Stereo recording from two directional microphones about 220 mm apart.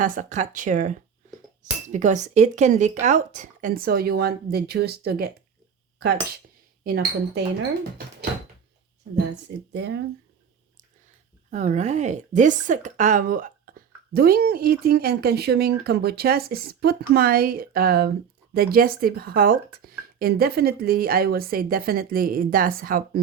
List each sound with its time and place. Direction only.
0.0 s speech: 35° right (ahead or behind)
6.8 s a woman's voice: 45° right (ahead or behind)
9.1 s a woman's voice: 50° right (ahead or behind)
11.5 s a woman's voice: 30° right (ahead or behind)